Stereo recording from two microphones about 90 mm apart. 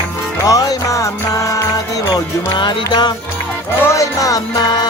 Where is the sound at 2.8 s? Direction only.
50° left (ahead or behind).